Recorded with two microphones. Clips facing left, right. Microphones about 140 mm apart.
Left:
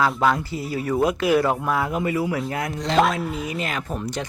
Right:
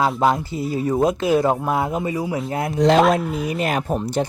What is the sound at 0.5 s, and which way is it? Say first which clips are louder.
Speech: right 4 dB; centre (ahead or behind).